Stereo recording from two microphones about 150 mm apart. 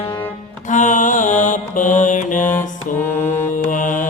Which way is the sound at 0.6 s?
55° left (ahead or behind).